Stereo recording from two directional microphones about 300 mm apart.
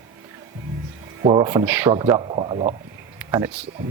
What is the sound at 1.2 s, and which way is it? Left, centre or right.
Speech, centre.